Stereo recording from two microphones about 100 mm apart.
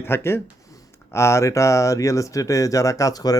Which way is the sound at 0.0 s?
25° left (ahead or behind).